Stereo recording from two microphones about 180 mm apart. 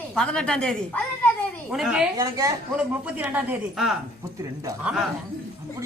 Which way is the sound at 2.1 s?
20° right (ahead or behind).